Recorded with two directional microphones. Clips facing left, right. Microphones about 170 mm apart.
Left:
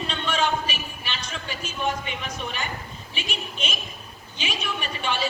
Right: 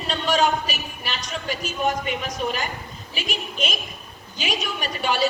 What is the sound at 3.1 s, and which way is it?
A woman's voice, 40° right (ahead or behind).